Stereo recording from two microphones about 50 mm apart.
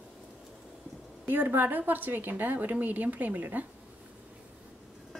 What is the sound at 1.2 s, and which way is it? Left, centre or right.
A woman's voice, right.